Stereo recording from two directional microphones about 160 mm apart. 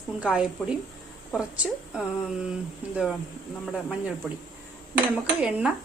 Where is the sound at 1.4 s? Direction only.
5° right (ahead or behind).